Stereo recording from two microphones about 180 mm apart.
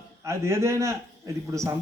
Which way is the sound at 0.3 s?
15° right (ahead or behind).